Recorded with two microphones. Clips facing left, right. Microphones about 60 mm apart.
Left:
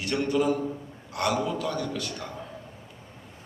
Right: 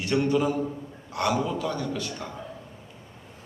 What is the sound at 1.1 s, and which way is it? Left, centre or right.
Speech, right.